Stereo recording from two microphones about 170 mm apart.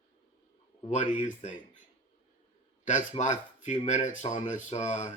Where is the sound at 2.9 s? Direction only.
45° left (ahead or behind).